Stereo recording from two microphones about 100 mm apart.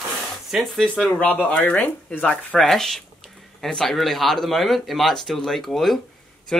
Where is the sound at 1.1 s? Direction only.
15° left (ahead or behind).